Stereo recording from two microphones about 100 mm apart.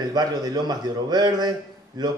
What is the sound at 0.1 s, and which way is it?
A man's voice, 45° right (ahead or behind).